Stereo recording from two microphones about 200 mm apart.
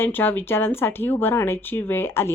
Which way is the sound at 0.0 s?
10° left (ahead or behind).